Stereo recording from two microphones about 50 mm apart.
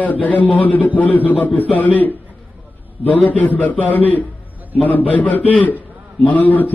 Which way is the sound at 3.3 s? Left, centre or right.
Left.